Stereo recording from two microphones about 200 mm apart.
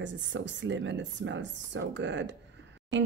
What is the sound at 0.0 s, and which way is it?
Speech, 65° right (ahead or behind).